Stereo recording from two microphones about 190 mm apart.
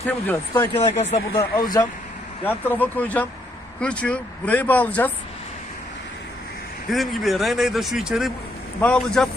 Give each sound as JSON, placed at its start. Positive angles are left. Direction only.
{"t": 0.3, "sound": "speech", "side_deg": 10}
{"t": 0.7, "sound": "speech", "side_deg": 35}
{"t": 1.4, "sound": "speech", "side_deg": 15}
{"t": 6.9, "sound": "a man's voice", "side_deg": 0}